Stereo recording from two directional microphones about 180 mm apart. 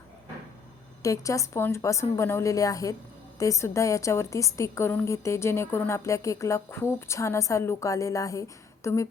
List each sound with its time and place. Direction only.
1.0 s a woman's voice: 20° left (ahead or behind)